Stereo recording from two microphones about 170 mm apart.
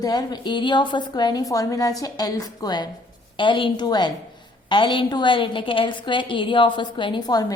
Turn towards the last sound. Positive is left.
turn(degrees=20)  # may be behind; listen again after turning